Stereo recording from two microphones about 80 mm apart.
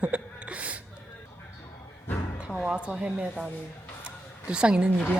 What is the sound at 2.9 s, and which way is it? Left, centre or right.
Speech, centre.